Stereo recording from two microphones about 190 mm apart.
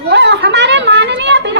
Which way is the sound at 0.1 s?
65° right (ahead or behind).